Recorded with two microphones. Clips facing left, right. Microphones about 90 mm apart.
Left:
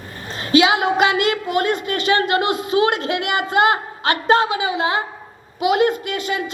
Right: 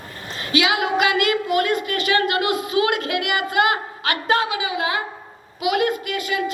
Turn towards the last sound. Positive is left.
turn(degrees=30)  # may be behind; listen again after turning